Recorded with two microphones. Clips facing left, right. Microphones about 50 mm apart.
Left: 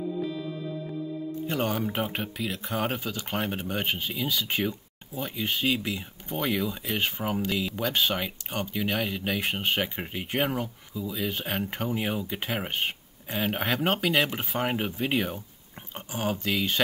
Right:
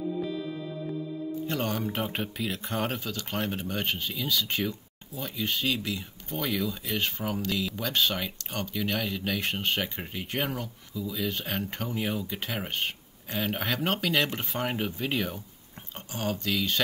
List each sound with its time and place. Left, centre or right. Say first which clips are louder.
1.5 s speech: left 3 dB; centre
3.0 s speech: left 1 dB; centre